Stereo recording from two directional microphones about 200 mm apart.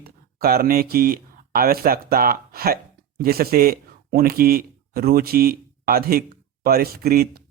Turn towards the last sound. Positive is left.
turn(degrees=-50)  # may be behind; listen again after turning